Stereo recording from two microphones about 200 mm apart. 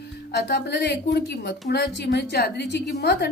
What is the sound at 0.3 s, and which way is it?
Speech, 55° left (ahead or behind).